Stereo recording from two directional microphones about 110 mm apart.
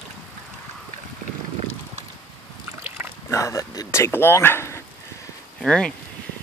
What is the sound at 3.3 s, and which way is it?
Speech, 30° left (ahead or behind).